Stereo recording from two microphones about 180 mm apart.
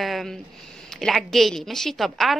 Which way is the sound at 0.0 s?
Centre (ahead or behind).